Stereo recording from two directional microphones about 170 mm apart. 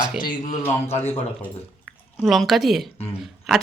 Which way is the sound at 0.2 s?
25° left (ahead or behind).